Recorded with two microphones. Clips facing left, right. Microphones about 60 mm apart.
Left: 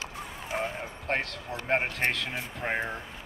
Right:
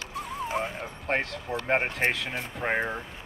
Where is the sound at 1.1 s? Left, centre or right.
Centre.